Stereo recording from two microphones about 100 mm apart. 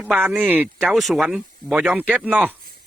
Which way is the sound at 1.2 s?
10° right (ahead or behind).